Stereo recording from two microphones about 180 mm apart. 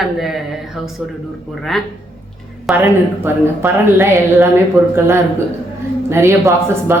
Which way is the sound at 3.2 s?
10° right (ahead or behind).